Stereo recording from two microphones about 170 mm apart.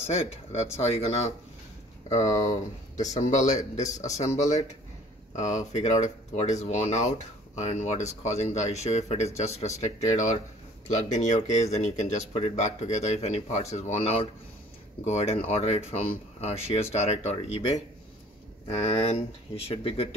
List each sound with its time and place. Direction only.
0.0 s speech: 35° left (ahead or behind)